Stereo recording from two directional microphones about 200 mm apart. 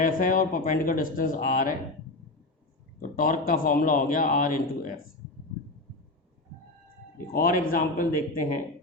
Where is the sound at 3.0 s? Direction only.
45° left (ahead or behind).